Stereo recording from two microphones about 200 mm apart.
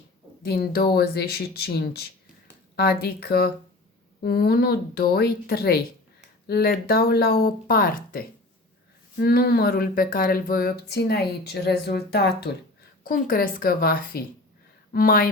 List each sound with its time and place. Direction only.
0.4 s speech: 50° left (ahead or behind)